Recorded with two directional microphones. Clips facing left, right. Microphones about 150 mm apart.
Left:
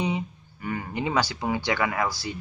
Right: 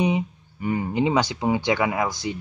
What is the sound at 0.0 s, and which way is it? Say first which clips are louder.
Speech: right 5 dB; 20° right (ahead or behind).